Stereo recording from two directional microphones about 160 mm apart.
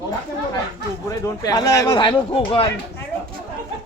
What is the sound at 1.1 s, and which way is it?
Speech, 25° left (ahead or behind).